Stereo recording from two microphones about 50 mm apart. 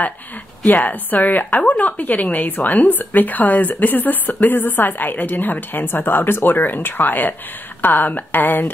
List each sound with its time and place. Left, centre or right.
0.7 s a woman's voice: left